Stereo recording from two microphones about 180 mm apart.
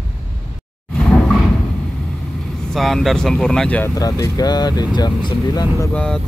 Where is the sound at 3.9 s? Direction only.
20° left (ahead or behind).